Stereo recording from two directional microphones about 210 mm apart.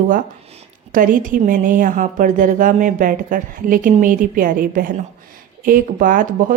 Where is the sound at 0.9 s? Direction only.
40° right (ahead or behind).